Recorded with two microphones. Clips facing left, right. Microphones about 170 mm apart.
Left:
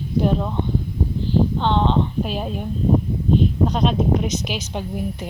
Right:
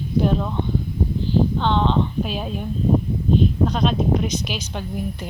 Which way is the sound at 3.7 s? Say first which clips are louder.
Left 1 dB; 15° left (ahead or behind).